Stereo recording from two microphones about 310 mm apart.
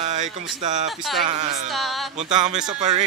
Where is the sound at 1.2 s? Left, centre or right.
Right.